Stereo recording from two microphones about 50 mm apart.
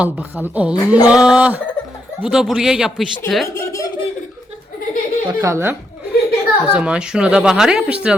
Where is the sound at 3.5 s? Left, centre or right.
Left.